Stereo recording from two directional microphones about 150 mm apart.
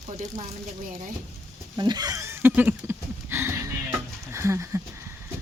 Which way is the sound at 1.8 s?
25° right (ahead or behind).